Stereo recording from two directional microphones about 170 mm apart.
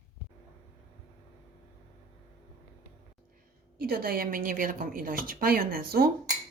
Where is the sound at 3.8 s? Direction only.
60° right (ahead or behind).